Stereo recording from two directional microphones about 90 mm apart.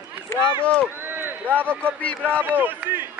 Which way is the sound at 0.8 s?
25° right (ahead or behind).